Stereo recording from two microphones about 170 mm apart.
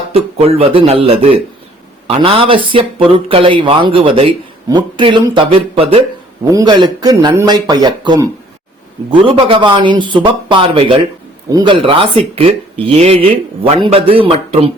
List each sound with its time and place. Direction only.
0.1 s speech: 35° right (ahead or behind)
6.4 s a man's voice: 20° right (ahead or behind)
9.3 s a man's voice: 30° right (ahead or behind)